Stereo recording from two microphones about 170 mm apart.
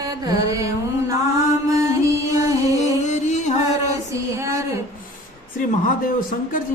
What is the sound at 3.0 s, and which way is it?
Music, 45° left (ahead or behind).